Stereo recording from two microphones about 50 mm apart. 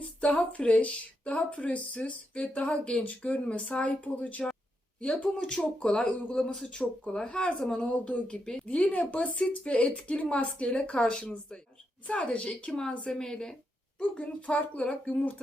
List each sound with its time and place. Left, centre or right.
0.0 s speech: left
5.0 s speech: centre
5.4 s speech: left
6.1 s speech: left
6.5 s speech: centre
7.9 s speech: left; by 13.5 s centre
14.0 s speech: left